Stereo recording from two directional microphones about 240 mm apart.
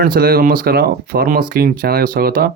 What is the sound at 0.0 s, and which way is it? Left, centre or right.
Speech, right.